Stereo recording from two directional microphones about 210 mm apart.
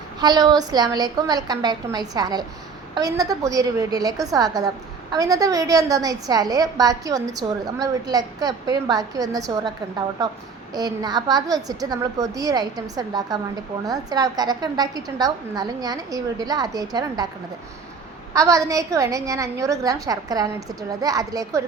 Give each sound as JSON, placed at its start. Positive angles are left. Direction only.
{"t": 0.2, "sound": "a woman's voice", "side_deg": -20}
{"t": 18.3, "sound": "a woman's voice", "side_deg": -15}